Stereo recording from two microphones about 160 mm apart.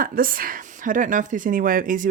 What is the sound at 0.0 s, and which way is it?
A woman's voice, 60° right (ahead or behind).